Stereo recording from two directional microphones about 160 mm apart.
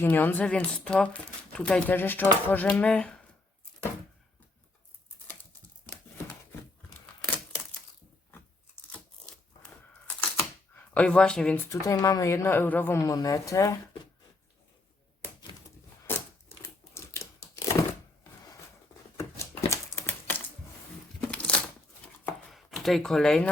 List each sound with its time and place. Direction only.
0.0 s speech: 10° left (ahead or behind)
7.3 s a sound: 15° left (ahead or behind)
10.8 s speech: 10° left (ahead or behind)
11.7 s a woman's voice: 20° left (ahead or behind)
16.1 s a sound: 15° left (ahead or behind)
16.9 s tearing: 15° left (ahead or behind)
19.1 s a sound: 20° left (ahead or behind)
21.2 s crumpling: 5° left (ahead or behind)
22.2 s chopping: 5° left (ahead or behind)